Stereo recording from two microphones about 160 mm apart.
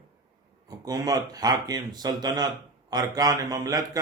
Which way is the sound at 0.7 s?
25° right (ahead or behind).